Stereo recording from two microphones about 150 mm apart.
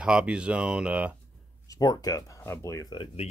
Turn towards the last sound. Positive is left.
turn(degrees=40)  # may be behind; listen again after turning